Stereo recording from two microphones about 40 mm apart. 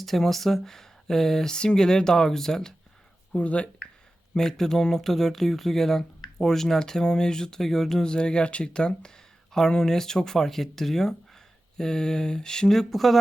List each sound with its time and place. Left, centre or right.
0.0 s speech: centre
3.3 s speech: left
4.4 s speech: centre